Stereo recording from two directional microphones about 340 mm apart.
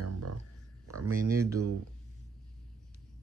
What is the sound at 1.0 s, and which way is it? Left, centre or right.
Speech, centre.